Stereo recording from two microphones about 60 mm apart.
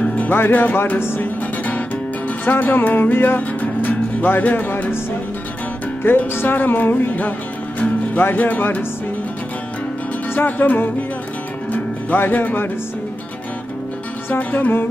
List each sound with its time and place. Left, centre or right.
0.1 s speech: left
0.9 s speech: left
2.4 s speech: left
6.0 s speech: left
10.3 s speech: left
11.7 s music: left
14.3 s speech: left